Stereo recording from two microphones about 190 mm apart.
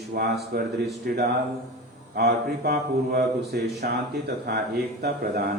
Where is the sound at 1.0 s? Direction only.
55° right (ahead or behind).